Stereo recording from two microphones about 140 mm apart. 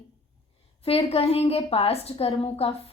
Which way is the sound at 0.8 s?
45° left (ahead or behind).